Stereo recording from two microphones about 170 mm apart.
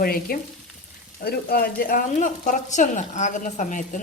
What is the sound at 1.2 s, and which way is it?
A woman's voice, 65° left (ahead or behind).